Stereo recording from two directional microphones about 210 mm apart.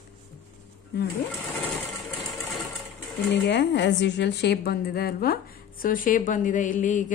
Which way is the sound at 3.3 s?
55° left (ahead or behind).